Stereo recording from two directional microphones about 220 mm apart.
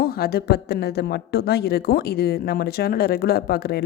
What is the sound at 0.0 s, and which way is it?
A woman's voice, 45° left (ahead or behind).